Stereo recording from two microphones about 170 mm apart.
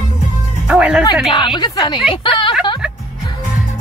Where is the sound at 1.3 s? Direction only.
30° left (ahead or behind).